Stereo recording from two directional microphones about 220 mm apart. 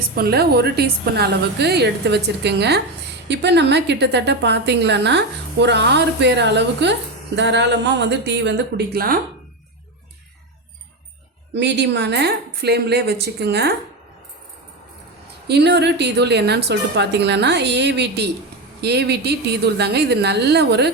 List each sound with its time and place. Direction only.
0.2 s a woman's voice: 45° right (ahead or behind)
11.5 s a woman's voice: 50° right (ahead or behind)
15.4 s a woman's voice: 50° right (ahead or behind)